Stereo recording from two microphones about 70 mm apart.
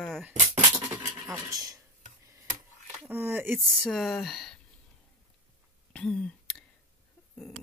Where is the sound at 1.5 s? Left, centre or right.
Right.